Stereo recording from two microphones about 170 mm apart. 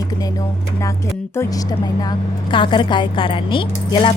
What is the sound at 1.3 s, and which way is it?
Speech, 20° left (ahead or behind).